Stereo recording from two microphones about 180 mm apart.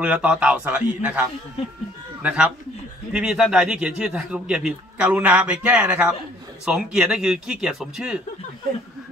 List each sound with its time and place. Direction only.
0.0 s a man's voice: 5° right (ahead or behind)
1.6 s speech: 30° left (ahead or behind)
2.2 s a man's voice: 5° right (ahead or behind)